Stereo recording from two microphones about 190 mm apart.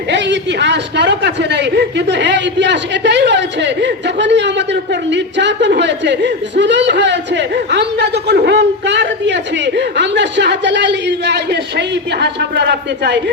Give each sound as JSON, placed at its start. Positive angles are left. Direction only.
{"t": 0.1, "sound": "a woman's voice", "side_deg": -65}